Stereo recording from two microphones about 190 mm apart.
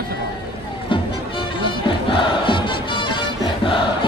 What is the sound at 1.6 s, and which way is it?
Music, 25° left (ahead or behind).